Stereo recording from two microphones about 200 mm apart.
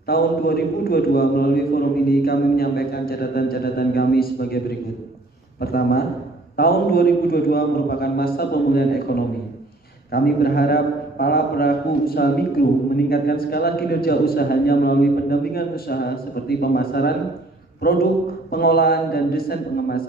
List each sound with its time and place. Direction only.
0.0 s a man's voice: 50° left (ahead or behind)
18.5 s a man's voice: 50° left (ahead or behind)